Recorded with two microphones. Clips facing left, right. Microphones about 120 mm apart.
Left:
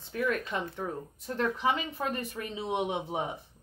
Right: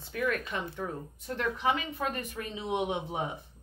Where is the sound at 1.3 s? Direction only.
30° left (ahead or behind).